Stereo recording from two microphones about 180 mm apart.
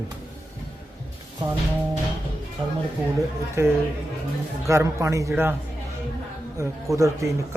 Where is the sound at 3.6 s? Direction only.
15° right (ahead or behind).